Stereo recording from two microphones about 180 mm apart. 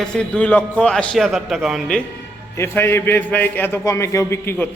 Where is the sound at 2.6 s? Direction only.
15° left (ahead or behind).